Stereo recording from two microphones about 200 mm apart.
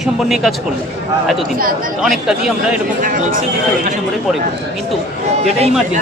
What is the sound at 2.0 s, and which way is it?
Speech, centre (ahead or behind).